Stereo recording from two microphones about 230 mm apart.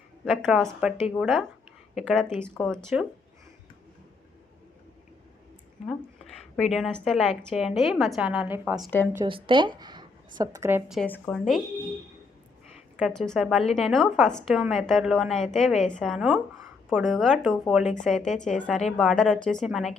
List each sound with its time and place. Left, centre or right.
0.3 s a woman's voice: centre
5.8 s a woman's voice: centre
9.2 s speech: right; by 11.6 s centre
13.0 s a woman's voice: centre